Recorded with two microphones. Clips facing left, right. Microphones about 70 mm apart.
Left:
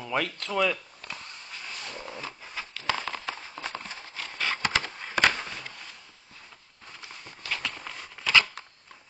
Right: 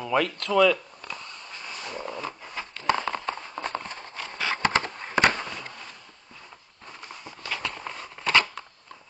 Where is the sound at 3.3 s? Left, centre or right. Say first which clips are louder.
Right 5 dB; right.